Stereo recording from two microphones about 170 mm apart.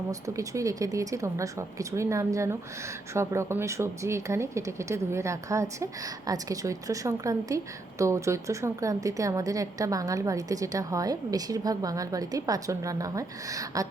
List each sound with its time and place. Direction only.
0.1 s speech: 20° right (ahead or behind)